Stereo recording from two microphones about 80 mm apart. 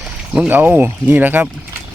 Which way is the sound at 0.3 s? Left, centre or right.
Right.